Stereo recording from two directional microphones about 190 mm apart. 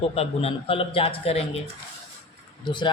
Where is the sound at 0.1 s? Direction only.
30° left (ahead or behind).